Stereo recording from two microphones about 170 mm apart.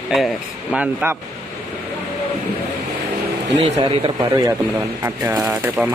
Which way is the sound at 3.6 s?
35° right (ahead or behind).